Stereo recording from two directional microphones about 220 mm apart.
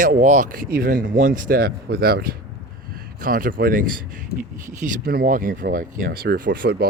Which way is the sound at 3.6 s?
40° right (ahead or behind).